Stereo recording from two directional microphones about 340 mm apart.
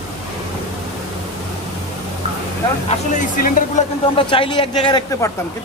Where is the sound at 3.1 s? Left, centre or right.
Left.